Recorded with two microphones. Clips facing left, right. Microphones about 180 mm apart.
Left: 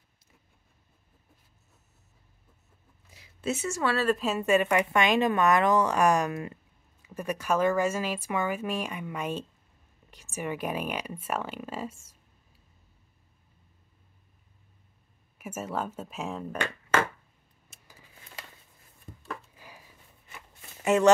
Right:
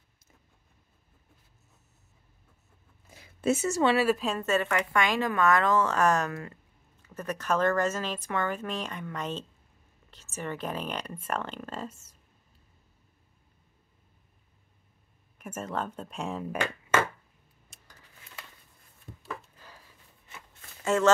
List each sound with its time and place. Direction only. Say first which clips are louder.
3.1 s a sound: right 5 dB; 50° right (ahead or behind)
3.8 s a woman's voice: right 2 dB; 15° right (ahead or behind)
4.4 s a woman's voice: left 4 dB; 15° left (ahead or behind)
15.3 s speech: left 1 dB; 5° left (ahead or behind)
17.6 s dishes: left 2 dB; 10° left (ahead or behind)
19.5 s a sound: left 2 dB; 10° left (ahead or behind)
20.8 s speech: left 3 dB; 15° left (ahead or behind)